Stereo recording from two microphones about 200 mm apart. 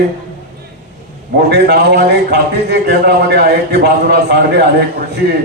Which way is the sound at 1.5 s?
55° right (ahead or behind).